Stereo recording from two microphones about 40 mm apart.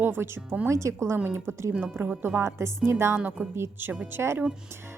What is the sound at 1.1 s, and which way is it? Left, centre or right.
Speech, right.